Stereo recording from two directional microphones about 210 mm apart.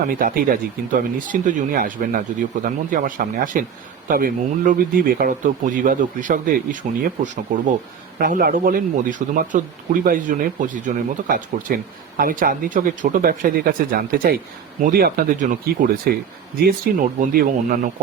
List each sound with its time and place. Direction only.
0.1 s speech: 45° right (ahead or behind)